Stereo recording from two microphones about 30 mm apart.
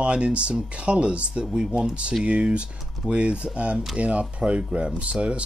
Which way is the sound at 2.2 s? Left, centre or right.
Right.